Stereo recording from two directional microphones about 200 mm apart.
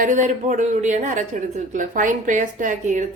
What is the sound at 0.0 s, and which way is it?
A woman's voice, 40° right (ahead or behind).